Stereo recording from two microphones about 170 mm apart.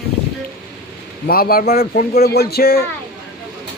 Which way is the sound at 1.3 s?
60° left (ahead or behind).